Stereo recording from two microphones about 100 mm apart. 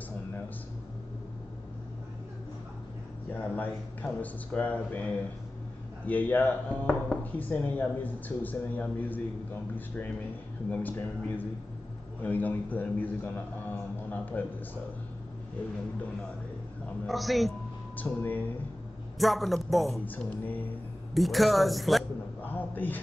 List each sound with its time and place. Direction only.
3.3 s a man's voice: 20° left (ahead or behind)
17.1 s speech: centre (ahead or behind)
17.9 s speech: 15° left (ahead or behind)
19.1 s speech: centre (ahead or behind)
20.1 s speech: 15° left (ahead or behind)
21.1 s speech: centre (ahead or behind)
22.4 s a sound: 20° left (ahead or behind)